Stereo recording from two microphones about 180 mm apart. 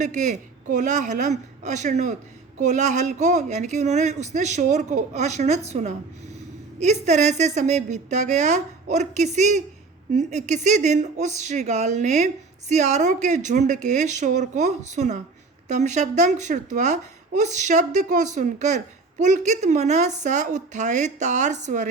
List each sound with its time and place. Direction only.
0.0 s a woman's voice: 40° right (ahead or behind)